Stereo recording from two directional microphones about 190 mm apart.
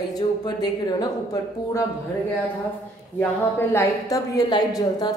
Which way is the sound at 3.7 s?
20° left (ahead or behind).